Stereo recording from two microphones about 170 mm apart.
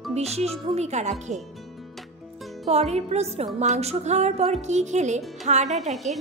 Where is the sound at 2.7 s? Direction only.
40° right (ahead or behind).